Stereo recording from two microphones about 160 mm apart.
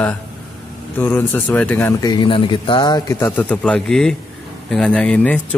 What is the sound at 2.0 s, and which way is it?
Speech, 30° left (ahead or behind).